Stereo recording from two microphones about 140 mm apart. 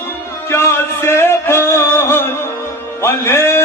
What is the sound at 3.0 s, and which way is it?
Music, 15° left (ahead or behind).